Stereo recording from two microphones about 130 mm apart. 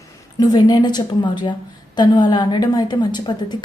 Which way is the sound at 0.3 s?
30° left (ahead or behind).